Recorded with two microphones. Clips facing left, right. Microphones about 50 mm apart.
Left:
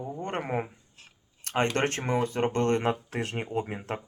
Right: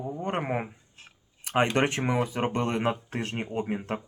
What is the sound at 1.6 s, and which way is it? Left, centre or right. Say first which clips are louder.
Speech: right 2 dB; centre.